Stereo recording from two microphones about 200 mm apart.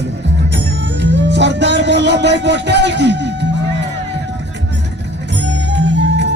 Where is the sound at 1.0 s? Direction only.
60° right (ahead or behind).